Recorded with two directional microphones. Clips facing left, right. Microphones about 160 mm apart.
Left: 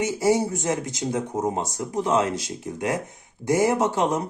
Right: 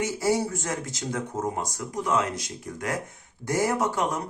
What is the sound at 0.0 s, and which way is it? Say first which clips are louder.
Speech: left 4 dB; 20° left (ahead or behind).